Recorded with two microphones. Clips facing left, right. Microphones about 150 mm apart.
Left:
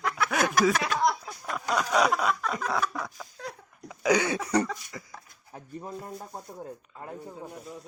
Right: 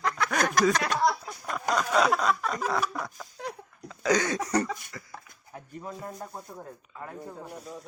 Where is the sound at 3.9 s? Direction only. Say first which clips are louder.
Left 1 dB; 10° left (ahead or behind).